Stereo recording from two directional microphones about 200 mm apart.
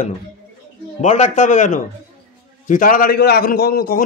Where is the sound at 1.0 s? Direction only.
35° left (ahead or behind).